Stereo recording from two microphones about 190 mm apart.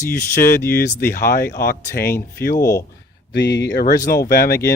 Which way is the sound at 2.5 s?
15° left (ahead or behind).